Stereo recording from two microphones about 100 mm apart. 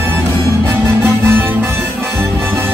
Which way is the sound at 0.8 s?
25° right (ahead or behind).